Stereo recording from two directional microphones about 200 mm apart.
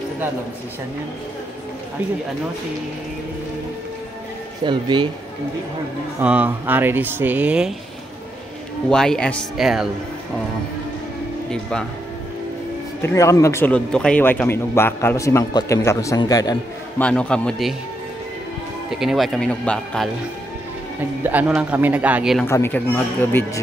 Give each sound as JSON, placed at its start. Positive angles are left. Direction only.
{"t": 4.6, "sound": "speech", "side_deg": -25}
{"t": 6.2, "sound": "speech", "side_deg": -10}
{"t": 8.9, "sound": "speech", "side_deg": 5}
{"t": 13.0, "sound": "speech", "side_deg": 15}
{"t": 17.0, "sound": "speech", "side_deg": 5}
{"t": 18.9, "sound": "speech", "side_deg": 0}
{"t": 21.2, "sound": "speech", "side_deg": -10}
{"t": 22.5, "sound": "speech", "side_deg": 10}